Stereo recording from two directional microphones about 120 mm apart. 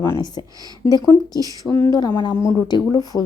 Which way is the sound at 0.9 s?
35° left (ahead or behind).